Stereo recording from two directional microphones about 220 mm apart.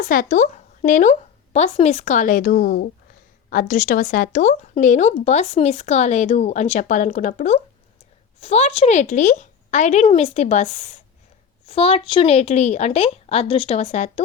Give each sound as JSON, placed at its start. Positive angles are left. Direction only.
{"t": 0.0, "sound": "speech", "side_deg": 40}